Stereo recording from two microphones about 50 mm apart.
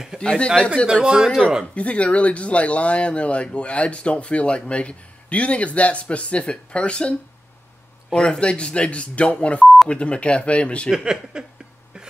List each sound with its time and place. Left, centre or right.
0.2 s speech: centre
1.0 s speech: centre
1.8 s speech: left
11.3 s speech: centre